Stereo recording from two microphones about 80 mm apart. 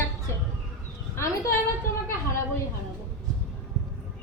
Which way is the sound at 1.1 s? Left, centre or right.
Left.